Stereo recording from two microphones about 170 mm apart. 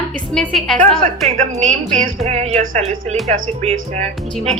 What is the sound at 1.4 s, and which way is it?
Speech, 40° right (ahead or behind).